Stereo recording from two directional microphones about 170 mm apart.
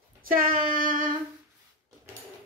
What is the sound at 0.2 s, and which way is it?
Child singing, 55° right (ahead or behind).